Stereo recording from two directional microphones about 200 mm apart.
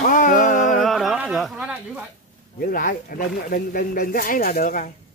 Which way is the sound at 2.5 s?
45° left (ahead or behind).